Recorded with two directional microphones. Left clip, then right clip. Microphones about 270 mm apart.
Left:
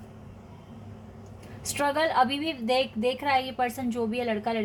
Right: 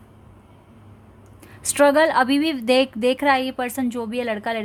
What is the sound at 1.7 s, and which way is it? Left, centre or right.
A woman's voice, right.